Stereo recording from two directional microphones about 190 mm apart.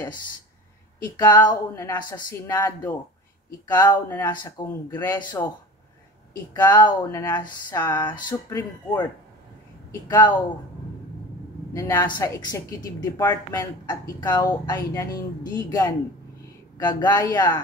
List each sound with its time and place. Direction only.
1.0 s a woman's voice: 20° left (ahead or behind)
10.0 s a woman's voice: 20° left (ahead or behind)
11.7 s a woman's voice: 15° left (ahead or behind)